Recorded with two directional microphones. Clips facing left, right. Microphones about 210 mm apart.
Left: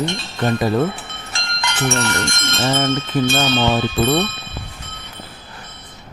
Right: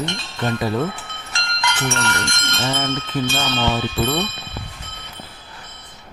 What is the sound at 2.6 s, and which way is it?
Speech, 45° left (ahead or behind).